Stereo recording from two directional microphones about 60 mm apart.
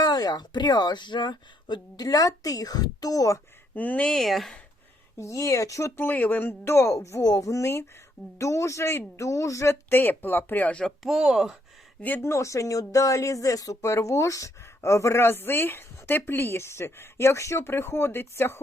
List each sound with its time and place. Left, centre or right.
0.0 s a sound: left
2.0 s a woman's voice: left
3.8 s speech: left
4.1 s speech: centre
5.1 s speech: left
6.0 s speech: left
6.9 s speech: left
9.9 s speech: left
10.7 s speech: centre
11.0 s speech: centre
12.2 s speech: left
15.2 s a woman's voice: left